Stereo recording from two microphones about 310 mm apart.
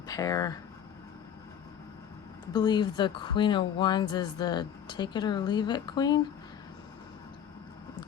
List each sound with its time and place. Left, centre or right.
0.1 s speech: centre
2.5 s speech: centre